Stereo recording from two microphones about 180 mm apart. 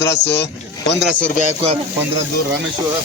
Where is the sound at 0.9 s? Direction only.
Centre (ahead or behind).